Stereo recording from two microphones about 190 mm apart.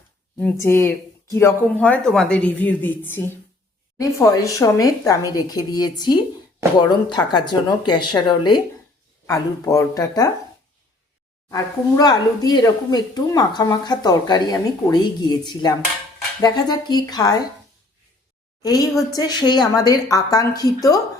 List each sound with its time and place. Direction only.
0.6 s speech: 15° left (ahead or behind)
11.5 s speech: 20° left (ahead or behind)
18.6 s speech: 20° left (ahead or behind)